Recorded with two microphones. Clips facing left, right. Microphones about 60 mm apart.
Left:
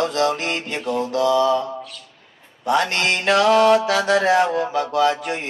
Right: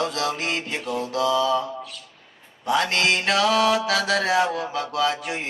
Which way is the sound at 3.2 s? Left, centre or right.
Centre.